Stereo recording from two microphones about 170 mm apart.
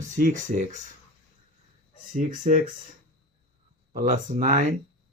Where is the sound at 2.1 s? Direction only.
50° right (ahead or behind).